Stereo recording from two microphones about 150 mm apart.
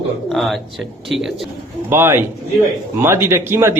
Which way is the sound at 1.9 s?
15° right (ahead or behind).